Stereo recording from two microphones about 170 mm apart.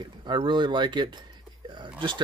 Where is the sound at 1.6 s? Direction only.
25° right (ahead or behind).